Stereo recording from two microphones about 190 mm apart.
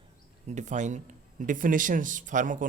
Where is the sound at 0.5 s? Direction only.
40° right (ahead or behind).